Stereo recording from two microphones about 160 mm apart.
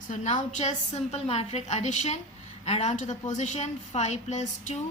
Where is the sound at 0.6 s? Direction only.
45° left (ahead or behind).